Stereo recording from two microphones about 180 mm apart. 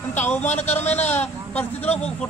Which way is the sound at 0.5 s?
40° left (ahead or behind).